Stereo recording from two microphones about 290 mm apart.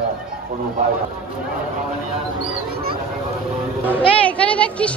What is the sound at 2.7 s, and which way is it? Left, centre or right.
Speech, right.